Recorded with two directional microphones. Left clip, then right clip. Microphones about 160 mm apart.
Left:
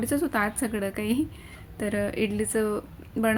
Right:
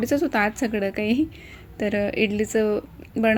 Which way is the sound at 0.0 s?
15° right (ahead or behind).